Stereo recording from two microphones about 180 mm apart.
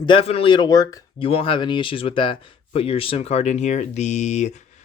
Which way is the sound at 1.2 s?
30° left (ahead or behind).